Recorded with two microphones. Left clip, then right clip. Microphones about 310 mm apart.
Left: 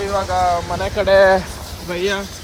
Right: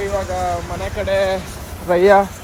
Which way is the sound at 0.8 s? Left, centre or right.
Centre.